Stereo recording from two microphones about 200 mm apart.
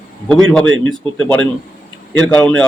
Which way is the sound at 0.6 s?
75° right (ahead or behind).